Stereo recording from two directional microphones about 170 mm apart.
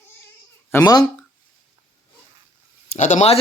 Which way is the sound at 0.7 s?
20° left (ahead or behind).